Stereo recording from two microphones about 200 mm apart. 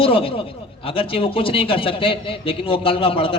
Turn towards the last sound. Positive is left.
turn(degrees=25)  # may be behind; listen again after turning